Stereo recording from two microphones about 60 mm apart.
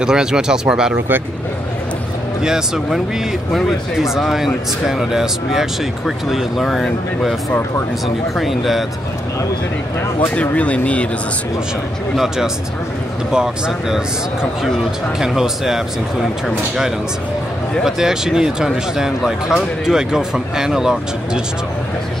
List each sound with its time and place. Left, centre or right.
0.0 s speech: centre
0.9 s speech: right
2.4 s speech: centre
8.4 s speech: centre
10.3 s speech: left
13.3 s speech: centre
15.1 s speech: centre